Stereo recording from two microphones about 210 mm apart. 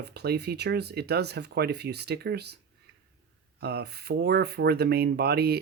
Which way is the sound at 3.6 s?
50° right (ahead or behind).